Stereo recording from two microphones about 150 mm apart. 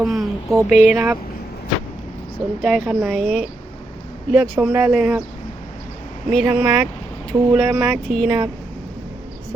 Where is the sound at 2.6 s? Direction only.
Centre (ahead or behind).